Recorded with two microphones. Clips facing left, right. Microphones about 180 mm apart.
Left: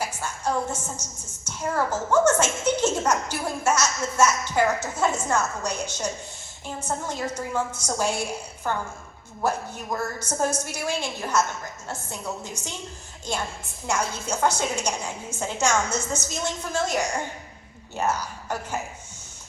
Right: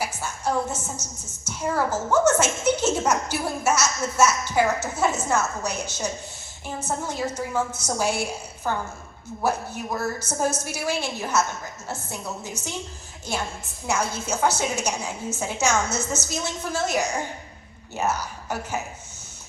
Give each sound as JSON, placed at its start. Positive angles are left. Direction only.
{"t": 0.0, "sound": "a sound", "side_deg": -10}
{"t": 1.5, "sound": "a woman's voice", "side_deg": -10}
{"t": 13.8, "sound": "a woman's voice", "side_deg": -5}